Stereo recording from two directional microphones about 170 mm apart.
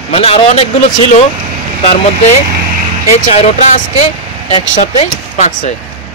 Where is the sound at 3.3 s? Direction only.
40° left (ahead or behind).